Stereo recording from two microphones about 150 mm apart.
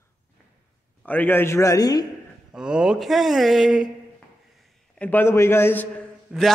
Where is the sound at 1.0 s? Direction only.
10° left (ahead or behind).